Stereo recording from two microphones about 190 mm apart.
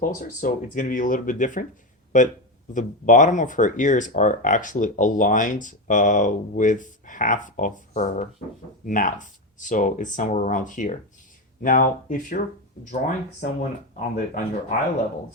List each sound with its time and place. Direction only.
0.0 s speech: 45° left (ahead or behind)
2.7 s speech: 40° left (ahead or behind)
13.4 s speech: 45° left (ahead or behind)